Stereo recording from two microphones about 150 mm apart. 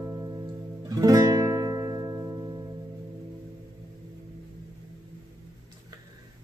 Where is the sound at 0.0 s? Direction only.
15° right (ahead or behind).